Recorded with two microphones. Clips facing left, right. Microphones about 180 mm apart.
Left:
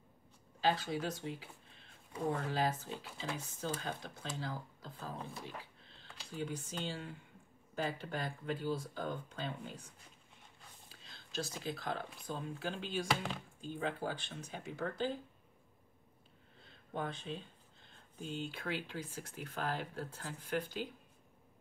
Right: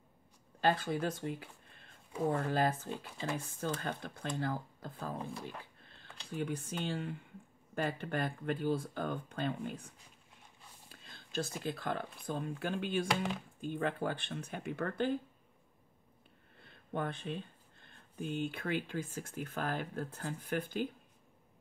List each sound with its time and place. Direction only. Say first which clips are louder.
0.6 s speech: right 3 dB; 55° right (ahead or behind)
5.8 s a sound: right 1 dB; 55° right (ahead or behind)
6.3 s speech: right 4 dB; 60° right (ahead or behind)
10.9 s whispering: right 2 dB; 55° right (ahead or behind)
11.6 s speech: right 3 dB; 55° right (ahead or behind)
13.1 s speech: right 2 dB; centre (ahead or behind)
13.6 s speech: right 3 dB; 60° right (ahead or behind)
16.5 s speech: right 3 dB; 60° right (ahead or behind)